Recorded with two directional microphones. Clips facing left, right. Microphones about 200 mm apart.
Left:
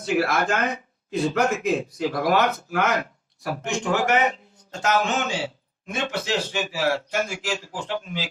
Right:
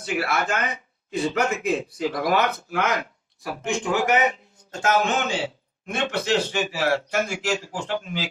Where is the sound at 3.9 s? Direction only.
40° left (ahead or behind).